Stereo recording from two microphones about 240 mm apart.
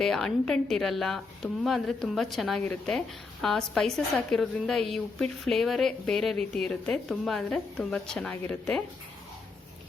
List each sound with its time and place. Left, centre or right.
0.0 s a woman's voice: centre